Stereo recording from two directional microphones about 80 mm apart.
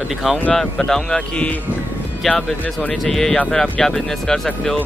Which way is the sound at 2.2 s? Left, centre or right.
Centre.